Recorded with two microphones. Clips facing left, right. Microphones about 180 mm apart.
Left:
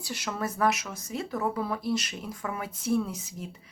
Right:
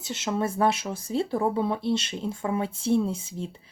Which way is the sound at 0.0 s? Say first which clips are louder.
Right 5 dB; 25° right (ahead or behind).